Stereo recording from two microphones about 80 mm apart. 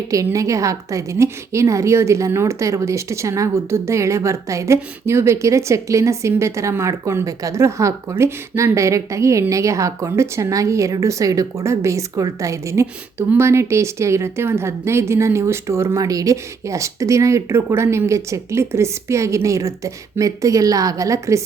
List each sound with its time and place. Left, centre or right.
0.3 s a woman's voice: right
16.0 s a woman's voice: right